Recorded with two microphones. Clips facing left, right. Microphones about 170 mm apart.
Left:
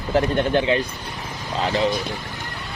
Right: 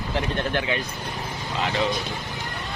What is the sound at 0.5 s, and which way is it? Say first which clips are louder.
Speech: left 8 dB; 30° left (ahead or behind).